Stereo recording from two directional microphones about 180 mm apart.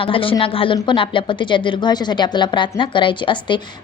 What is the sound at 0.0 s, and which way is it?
A woman's voice, 30° left (ahead or behind).